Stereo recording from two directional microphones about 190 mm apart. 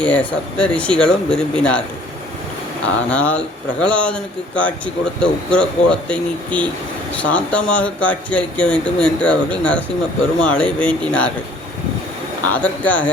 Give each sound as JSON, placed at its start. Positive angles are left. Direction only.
{"t": 0.0, "sound": "speech", "side_deg": 5}
{"t": 2.8, "sound": "speech", "side_deg": 5}
{"t": 12.5, "sound": "speech", "side_deg": 10}